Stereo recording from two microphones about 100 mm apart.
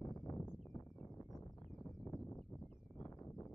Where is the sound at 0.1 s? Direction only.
35° left (ahead or behind).